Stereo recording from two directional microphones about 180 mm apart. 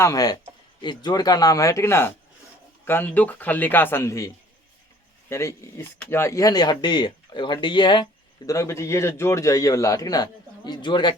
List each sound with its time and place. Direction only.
0.0 s a man's voice: 20° left (ahead or behind)
5.3 s a man's voice: 15° left (ahead or behind)